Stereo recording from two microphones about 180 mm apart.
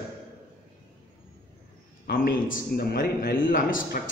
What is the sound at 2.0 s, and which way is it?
A man's voice, 55° left (ahead or behind).